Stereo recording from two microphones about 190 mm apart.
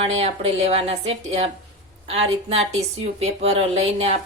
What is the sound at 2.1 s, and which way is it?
A woman's voice, 35° right (ahead or behind).